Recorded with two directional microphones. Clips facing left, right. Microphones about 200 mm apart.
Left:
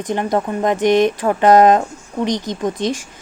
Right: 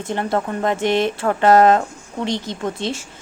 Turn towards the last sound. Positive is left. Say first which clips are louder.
# left 4 dB
turn(degrees=15)  # may be behind; listen again after turning